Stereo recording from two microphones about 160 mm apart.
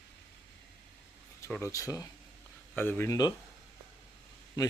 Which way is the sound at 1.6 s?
20° left (ahead or behind).